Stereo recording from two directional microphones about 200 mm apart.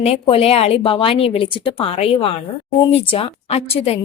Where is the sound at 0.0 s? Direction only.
30° left (ahead or behind).